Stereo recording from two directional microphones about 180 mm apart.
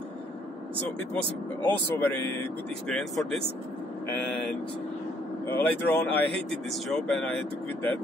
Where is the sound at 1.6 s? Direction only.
10° left (ahead or behind).